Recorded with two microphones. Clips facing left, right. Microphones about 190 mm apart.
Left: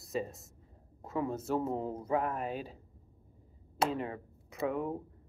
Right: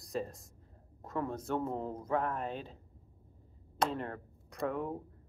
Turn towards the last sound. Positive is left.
turn(degrees=5)  # may be behind; listen again after turning